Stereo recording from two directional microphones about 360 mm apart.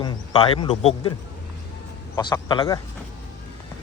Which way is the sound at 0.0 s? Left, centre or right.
Centre.